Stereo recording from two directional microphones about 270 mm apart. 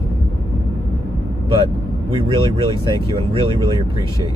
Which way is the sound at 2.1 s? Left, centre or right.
Centre.